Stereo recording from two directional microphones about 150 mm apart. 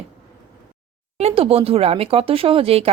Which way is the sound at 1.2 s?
40° right (ahead or behind).